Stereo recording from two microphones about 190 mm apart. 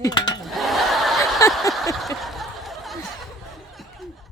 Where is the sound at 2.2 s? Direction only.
Centre (ahead or behind).